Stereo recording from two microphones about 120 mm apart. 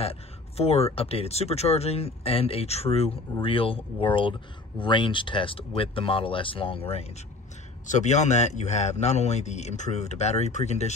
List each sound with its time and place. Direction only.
0.0 s speech: 55° left (ahead or behind)
7.8 s speech: 85° left